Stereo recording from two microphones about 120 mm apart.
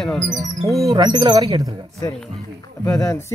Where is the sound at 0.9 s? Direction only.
35° right (ahead or behind).